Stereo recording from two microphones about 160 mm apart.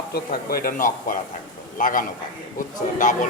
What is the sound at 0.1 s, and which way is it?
A man's voice, 70° left (ahead or behind).